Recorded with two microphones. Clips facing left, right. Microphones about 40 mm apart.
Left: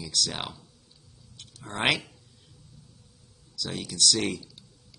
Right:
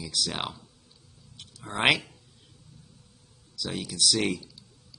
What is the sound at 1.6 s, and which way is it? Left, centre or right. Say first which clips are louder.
Speech: right 2 dB; centre.